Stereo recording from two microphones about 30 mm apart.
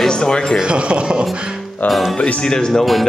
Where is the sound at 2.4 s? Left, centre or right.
Left.